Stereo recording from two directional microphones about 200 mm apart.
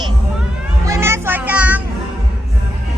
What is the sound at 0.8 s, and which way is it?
Children playing, 15° right (ahead or behind).